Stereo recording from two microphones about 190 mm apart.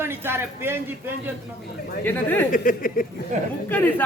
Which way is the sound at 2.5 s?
45° left (ahead or behind).